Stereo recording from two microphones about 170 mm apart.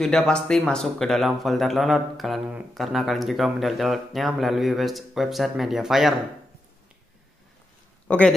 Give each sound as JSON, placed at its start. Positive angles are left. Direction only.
{"t": 0.0, "sound": "speech", "side_deg": 5}
{"t": 8.1, "sound": "speech", "side_deg": 5}